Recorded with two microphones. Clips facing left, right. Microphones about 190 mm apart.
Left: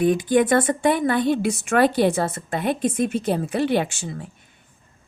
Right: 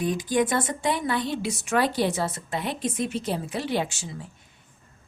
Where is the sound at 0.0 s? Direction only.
60° left (ahead or behind).